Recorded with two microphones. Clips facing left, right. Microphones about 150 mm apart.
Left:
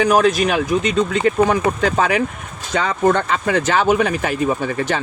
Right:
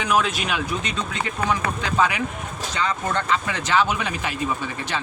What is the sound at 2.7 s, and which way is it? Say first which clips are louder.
Speech: left 9 dB; 65° left (ahead or behind).